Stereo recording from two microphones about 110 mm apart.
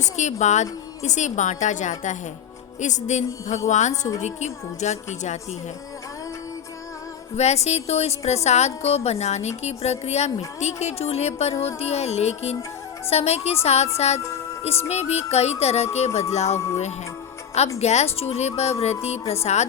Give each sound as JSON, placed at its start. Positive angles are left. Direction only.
{"t": 0.0, "sound": "speech", "side_deg": 90}
{"t": 7.3, "sound": "a woman's voice", "side_deg": 80}
{"t": 13.1, "sound": "music", "side_deg": 70}
{"t": 16.3, "sound": "a woman's voice", "side_deg": 85}
{"t": 17.7, "sound": "a woman's voice", "side_deg": 80}